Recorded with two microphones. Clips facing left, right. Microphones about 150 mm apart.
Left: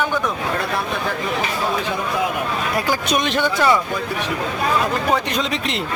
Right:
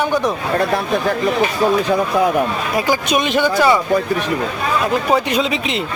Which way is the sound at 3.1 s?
5° right (ahead or behind).